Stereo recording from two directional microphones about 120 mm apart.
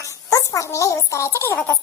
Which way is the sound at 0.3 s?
25° left (ahead or behind).